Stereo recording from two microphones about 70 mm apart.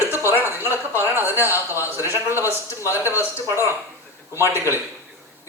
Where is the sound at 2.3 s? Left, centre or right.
Left.